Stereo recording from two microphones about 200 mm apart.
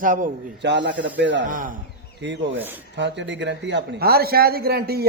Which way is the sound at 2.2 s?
65° right (ahead or behind).